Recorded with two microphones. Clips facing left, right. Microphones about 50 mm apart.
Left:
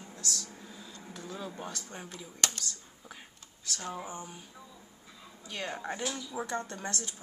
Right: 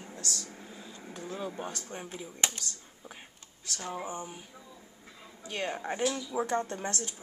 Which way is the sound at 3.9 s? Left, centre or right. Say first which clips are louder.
Right 5 dB; centre.